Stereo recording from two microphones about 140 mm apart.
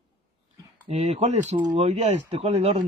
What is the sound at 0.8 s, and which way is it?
Speech, 50° right (ahead or behind).